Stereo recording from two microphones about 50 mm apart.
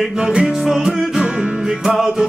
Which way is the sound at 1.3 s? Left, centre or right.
Centre.